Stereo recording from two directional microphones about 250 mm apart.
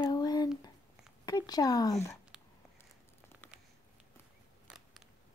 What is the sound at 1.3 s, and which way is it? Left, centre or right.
Speech, centre.